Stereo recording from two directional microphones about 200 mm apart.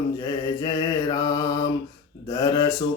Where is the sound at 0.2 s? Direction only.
20° left (ahead or behind).